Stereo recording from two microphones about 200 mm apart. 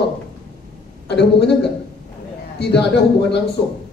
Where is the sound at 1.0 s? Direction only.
60° left (ahead or behind).